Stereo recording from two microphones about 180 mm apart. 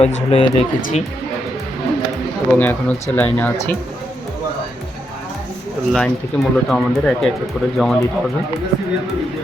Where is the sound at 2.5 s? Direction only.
10° left (ahead or behind).